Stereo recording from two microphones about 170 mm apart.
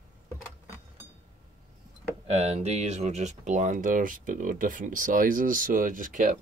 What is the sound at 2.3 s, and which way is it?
Speech, 40° right (ahead or behind).